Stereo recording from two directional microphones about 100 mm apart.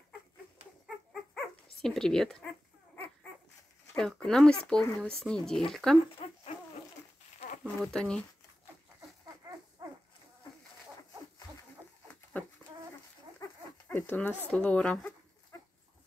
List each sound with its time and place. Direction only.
1.3 s dog: 5° left (ahead or behind)
3.9 s speech: 10° left (ahead or behind)
6.2 s dog: 90° left
7.6 s speech: 10° left (ahead or behind)
12.3 s bird: 15° left (ahead or behind)
13.8 s dog: 20° left (ahead or behind)
14.5 s speech: 10° left (ahead or behind)